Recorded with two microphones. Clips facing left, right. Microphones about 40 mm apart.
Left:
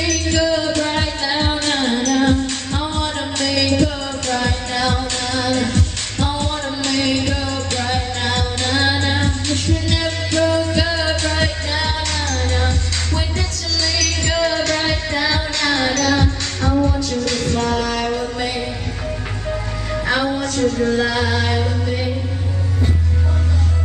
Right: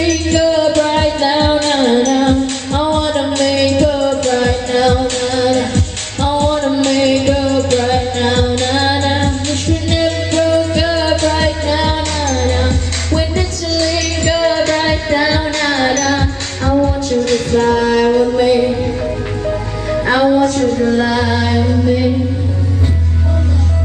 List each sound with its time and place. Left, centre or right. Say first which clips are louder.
0.0 s music: right 6 dB; right
14.3 s music: right 6 dB; centre
15.2 s child singing: right 5 dB; centre
15.5 s music: right 4 dB; right
17.2 s singing: right 8 dB; right
19.4 s music: right 5 dB; centre
20.4 s a sound: right 5 dB; right
20.7 s music: right 4 dB; centre
21.0 s music: right 4 dB; centre